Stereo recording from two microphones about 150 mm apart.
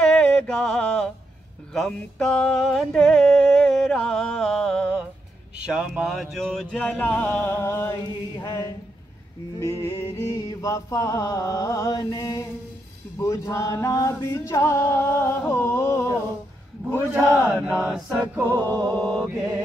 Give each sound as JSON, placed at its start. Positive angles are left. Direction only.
{"t": 0.0, "sound": "music", "side_deg": 5}
{"t": 1.7, "sound": "a sound", "side_deg": 5}
{"t": 5.7, "sound": "mantra", "side_deg": -5}
{"t": 9.6, "sound": "music", "side_deg": 20}
{"t": 13.2, "sound": "a sound", "side_deg": 20}
{"t": 14.2, "sound": "mantra", "side_deg": 20}
{"t": 17.2, "sound": "battle cry", "side_deg": 5}
{"t": 18.6, "sound": "music", "side_deg": -20}
{"t": 18.9, "sound": "mantra", "side_deg": 5}